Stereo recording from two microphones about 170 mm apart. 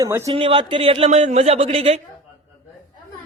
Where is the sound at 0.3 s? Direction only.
30° right (ahead or behind).